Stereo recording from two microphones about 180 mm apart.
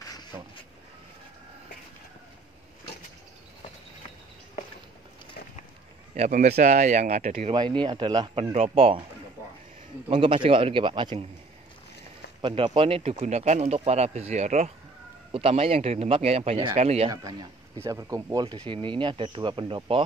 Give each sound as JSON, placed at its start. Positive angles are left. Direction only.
{"t": 0.1, "sound": "a sound", "side_deg": 25}
{"t": 6.1, "sound": "speech", "side_deg": -40}
{"t": 7.5, "sound": "speech", "side_deg": -25}
{"t": 8.5, "sound": "speech", "side_deg": -35}
{"t": 10.0, "sound": "speech", "side_deg": -30}
{"t": 12.4, "sound": "speech", "side_deg": -30}
{"t": 17.1, "sound": "speech", "side_deg": -20}